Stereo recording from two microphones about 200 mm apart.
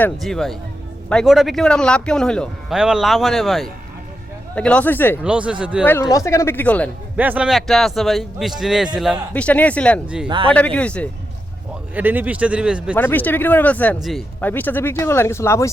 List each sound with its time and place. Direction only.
0.0 s a man's voice: centre (ahead or behind)
5.2 s a man's voice: 5° right (ahead or behind)
5.8 s speech: 10° left (ahead or behind)
7.2 s a man's voice: 5° right (ahead or behind)
10.2 s speech: 25° right (ahead or behind)
10.5 s a man's voice: 5° left (ahead or behind)
11.9 s speech: 10° right (ahead or behind)
13.0 s speech: 10° left (ahead or behind)